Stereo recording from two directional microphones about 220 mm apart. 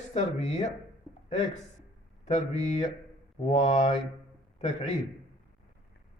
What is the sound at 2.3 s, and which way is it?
Speech, 30° left (ahead or behind).